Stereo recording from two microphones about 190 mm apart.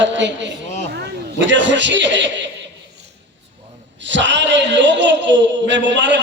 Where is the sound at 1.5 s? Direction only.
70° right (ahead or behind).